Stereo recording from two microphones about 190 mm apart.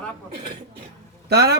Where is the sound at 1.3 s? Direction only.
60° right (ahead or behind).